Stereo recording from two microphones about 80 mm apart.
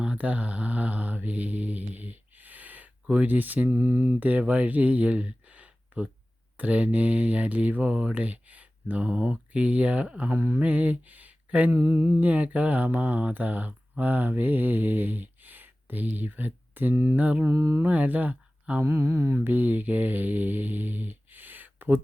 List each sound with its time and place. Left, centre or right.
0.0 s mantra: centre
4.1 s speech: centre
10.3 s speech: right
11.7 s mantra: right
17.5 s mantra: right
17.8 s speech: right
18.8 s mantra: right
19.5 s mantra: right